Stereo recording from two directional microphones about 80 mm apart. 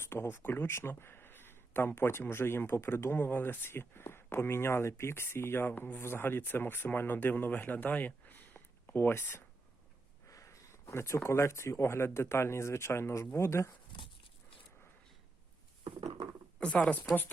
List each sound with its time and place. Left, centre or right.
0.0 s speech: left
10.2 s speech: left
16.6 s speech: centre